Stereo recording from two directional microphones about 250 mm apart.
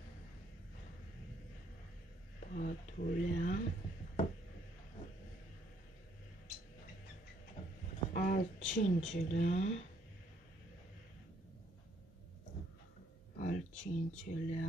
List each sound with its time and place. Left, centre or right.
2.5 s speech: left
8.1 s speech: left
13.4 s speech: left